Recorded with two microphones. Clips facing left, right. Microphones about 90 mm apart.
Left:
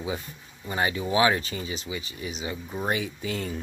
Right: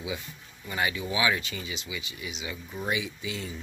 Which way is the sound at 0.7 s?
35° left (ahead or behind).